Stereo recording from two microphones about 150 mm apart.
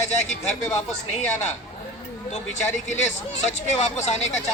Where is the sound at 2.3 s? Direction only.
50° left (ahead or behind).